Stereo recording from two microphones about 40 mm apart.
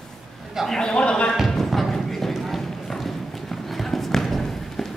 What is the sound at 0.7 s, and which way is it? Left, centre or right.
Speech, left.